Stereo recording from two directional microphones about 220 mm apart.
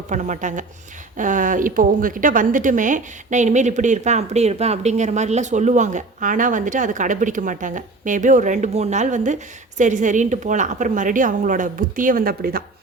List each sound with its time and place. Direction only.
0.1 s speech: 35° right (ahead or behind)